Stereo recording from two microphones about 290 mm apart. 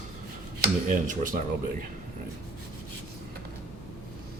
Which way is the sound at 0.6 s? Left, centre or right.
Right.